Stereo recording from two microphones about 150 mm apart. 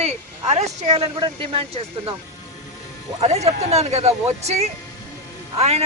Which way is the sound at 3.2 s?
45° right (ahead or behind).